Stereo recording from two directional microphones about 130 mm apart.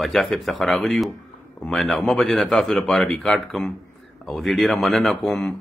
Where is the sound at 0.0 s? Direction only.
Centre (ahead or behind).